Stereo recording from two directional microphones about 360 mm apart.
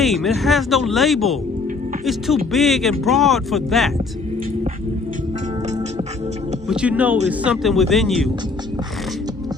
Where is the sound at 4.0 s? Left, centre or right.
Centre.